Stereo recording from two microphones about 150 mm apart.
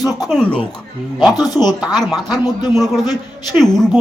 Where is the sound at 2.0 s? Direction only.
Centre (ahead or behind).